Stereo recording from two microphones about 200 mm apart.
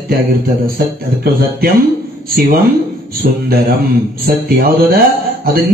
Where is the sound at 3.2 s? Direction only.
50° right (ahead or behind).